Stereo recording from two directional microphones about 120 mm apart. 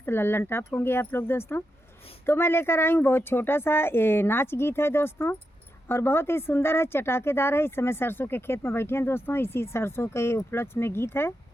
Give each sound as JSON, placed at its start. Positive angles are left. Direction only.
{"t": 0.0, "sound": "speech", "side_deg": 20}